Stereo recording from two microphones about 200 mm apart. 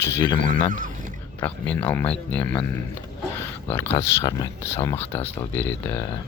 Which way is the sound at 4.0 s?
15° left (ahead or behind).